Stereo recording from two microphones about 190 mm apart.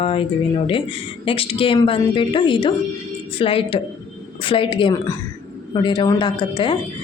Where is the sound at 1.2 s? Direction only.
30° left (ahead or behind).